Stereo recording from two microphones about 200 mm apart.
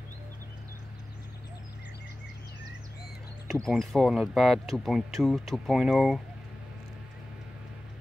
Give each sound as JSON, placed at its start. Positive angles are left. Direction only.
{"t": 3.6, "sound": "speech", "side_deg": 0}